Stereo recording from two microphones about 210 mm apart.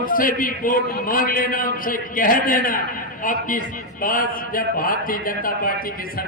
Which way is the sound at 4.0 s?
40° left (ahead or behind).